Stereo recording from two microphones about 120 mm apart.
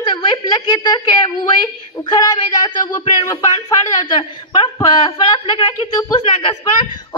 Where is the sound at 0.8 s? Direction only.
35° left (ahead or behind).